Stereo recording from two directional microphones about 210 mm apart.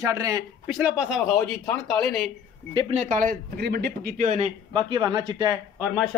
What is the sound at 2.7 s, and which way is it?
Speech, 25° right (ahead or behind).